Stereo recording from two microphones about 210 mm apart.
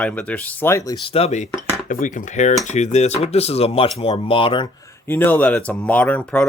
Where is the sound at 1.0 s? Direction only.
30° left (ahead or behind).